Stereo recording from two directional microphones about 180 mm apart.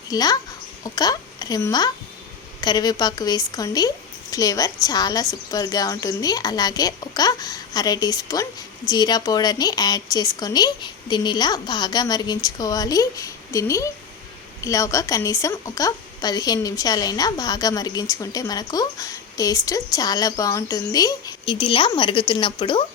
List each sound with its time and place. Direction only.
0.1 s a woman's voice: 20° left (ahead or behind)